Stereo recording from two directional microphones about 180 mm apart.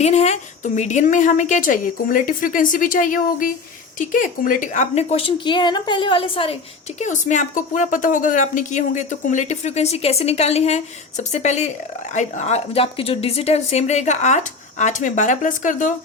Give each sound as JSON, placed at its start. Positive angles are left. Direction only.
{"t": 0.0, "sound": "a woman's voice", "side_deg": 40}
{"t": 7.0, "sound": "a woman's voice", "side_deg": 40}